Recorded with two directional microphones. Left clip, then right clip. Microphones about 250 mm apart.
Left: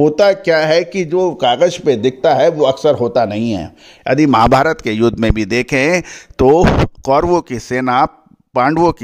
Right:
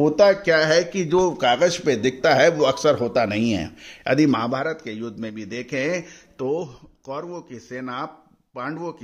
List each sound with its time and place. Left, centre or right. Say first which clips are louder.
0.0 s speech: left 5 dB; left
0.7 s a man's voice: left 6 dB; centre
1.4 s a man's voice: left 6 dB; left